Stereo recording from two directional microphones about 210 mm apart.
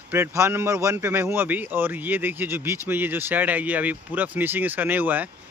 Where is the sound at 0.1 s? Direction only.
10° right (ahead or behind).